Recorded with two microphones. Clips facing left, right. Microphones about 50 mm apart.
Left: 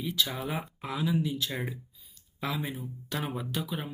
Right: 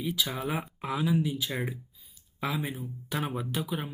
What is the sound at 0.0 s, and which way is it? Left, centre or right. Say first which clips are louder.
Speech: right 1 dB; centre.